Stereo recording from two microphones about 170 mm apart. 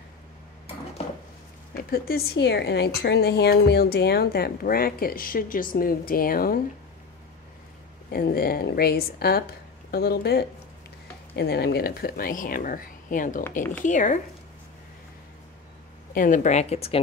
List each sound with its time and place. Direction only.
1.9 s a woman's voice: 60° left (ahead or behind)
8.1 s a woman's voice: 65° left (ahead or behind)
13.4 s speech: 15° left (ahead or behind)
13.8 s speech: 45° left (ahead or behind)
16.2 s speech: 45° left (ahead or behind)